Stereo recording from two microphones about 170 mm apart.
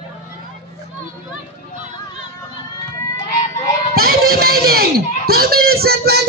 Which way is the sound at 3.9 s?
65° right (ahead or behind).